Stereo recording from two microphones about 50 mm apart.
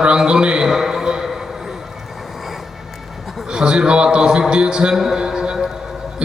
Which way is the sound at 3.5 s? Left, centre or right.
Centre.